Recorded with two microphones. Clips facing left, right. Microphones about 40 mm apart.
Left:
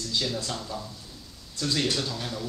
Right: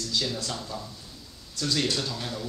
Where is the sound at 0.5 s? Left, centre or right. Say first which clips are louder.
Left 1 dB; centre.